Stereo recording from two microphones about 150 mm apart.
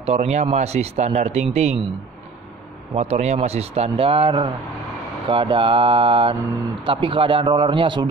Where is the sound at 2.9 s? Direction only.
45° right (ahead or behind).